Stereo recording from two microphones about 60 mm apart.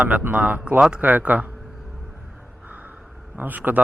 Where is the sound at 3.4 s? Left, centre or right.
Right.